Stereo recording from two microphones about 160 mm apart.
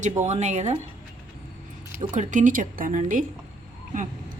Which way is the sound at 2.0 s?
50° right (ahead or behind).